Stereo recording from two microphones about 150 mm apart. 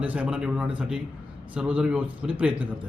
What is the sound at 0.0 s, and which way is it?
A man's voice, 10° right (ahead or behind).